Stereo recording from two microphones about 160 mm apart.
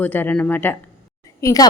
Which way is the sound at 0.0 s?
10° left (ahead or behind).